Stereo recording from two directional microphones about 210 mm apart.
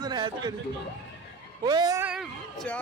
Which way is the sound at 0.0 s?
20° right (ahead or behind).